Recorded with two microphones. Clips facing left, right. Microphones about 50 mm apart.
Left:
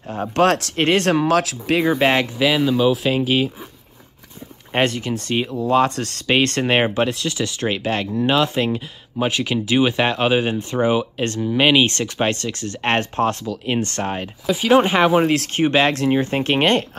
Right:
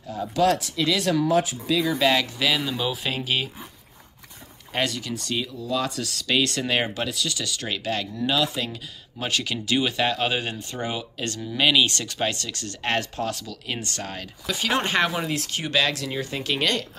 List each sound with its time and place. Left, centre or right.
0.1 s speech: left
0.6 s speech: left
0.8 s speech: left
1.8 s speech: left
2.3 s speech: centre
4.7 s speech: left
9.2 s speech: left
11.2 s speech: left
14.4 s speech: centre
15.2 s speech: left
15.5 s speech: left